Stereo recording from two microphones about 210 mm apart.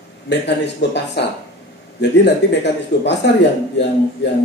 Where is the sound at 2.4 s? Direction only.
55° left (ahead or behind).